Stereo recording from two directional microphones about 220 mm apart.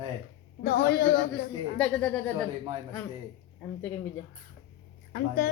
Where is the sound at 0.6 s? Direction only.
45° left (ahead or behind).